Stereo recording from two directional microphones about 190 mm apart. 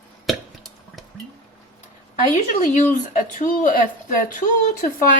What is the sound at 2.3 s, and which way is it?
Speech, 40° left (ahead or behind).